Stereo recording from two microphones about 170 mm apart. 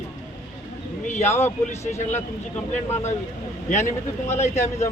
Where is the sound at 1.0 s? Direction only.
45° left (ahead or behind).